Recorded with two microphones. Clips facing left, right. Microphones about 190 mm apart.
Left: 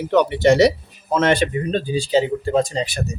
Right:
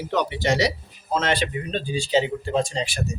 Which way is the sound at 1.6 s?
35° left (ahead or behind).